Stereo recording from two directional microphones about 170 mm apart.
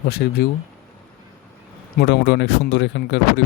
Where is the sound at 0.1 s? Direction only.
70° left (ahead or behind).